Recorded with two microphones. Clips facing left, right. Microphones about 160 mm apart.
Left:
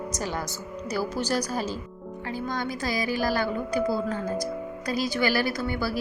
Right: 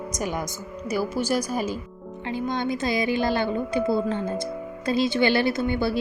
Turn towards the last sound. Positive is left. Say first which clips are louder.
# right 4 dB
turn(degrees=-25)  # may be behind; listen again after turning